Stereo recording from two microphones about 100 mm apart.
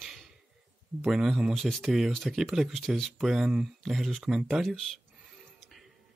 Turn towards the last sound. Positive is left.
turn(degrees=0)  # may be behind; listen again after turning